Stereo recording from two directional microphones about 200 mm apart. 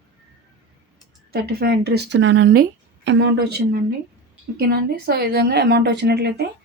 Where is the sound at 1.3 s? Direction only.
50° right (ahead or behind).